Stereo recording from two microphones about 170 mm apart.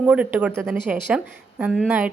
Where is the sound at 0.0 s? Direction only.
10° right (ahead or behind).